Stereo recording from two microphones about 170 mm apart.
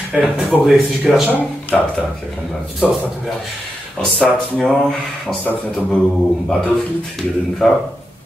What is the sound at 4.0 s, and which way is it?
Speech, 5° left (ahead or behind).